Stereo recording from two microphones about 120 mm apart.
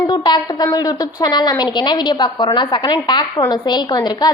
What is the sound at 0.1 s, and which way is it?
A woman's voice, 35° left (ahead or behind).